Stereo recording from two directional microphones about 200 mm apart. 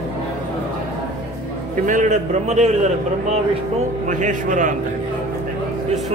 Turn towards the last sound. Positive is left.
turn(degrees=-40)  # may be behind; listen again after turning